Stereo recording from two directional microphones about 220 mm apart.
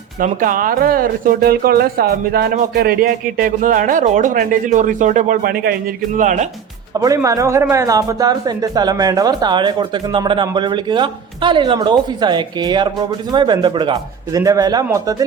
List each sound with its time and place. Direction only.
0.2 s speech: 40° right (ahead or behind)
6.9 s speech: 15° right (ahead or behind)